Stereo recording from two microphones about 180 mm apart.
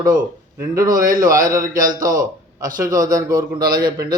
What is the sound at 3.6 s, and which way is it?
Speech, 55° right (ahead or behind).